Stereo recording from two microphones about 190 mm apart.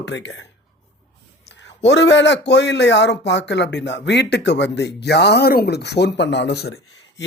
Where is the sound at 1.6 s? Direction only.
70° left (ahead or behind).